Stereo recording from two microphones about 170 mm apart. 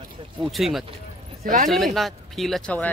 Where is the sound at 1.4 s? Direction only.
50° right (ahead or behind).